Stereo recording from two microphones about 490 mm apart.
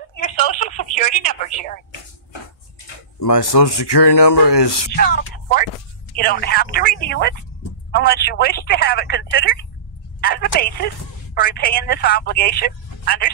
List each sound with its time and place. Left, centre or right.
0.1 s a woman's voice: centre
3.2 s speech: left
4.9 s speech: centre